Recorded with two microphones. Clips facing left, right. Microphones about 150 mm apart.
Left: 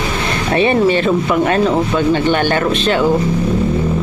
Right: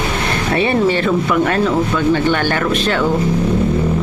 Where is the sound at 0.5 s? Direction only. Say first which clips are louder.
Left 3 dB; 20° left (ahead or behind).